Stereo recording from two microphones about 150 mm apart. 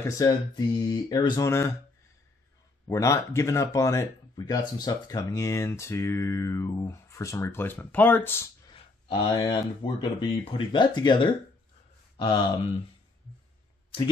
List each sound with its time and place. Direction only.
0.1 s speech: 25° left (ahead or behind)
1.5 s speech: 20° left (ahead or behind)
2.9 s speech: 20° left (ahead or behind)
8.6 s speech: 30° left (ahead or behind)